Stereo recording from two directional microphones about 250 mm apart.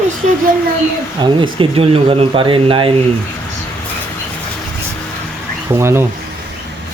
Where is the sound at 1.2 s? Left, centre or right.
Centre.